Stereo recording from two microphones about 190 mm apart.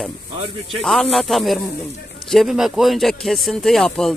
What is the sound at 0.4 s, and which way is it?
Speech, 30° right (ahead or behind).